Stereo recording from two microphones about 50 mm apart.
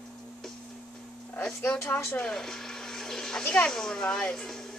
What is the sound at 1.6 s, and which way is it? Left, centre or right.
Speech, left.